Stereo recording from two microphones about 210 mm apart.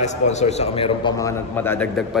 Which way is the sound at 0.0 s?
35° left (ahead or behind).